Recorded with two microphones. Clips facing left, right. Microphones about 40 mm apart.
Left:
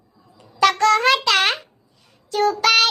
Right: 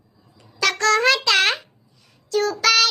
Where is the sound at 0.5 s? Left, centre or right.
Left.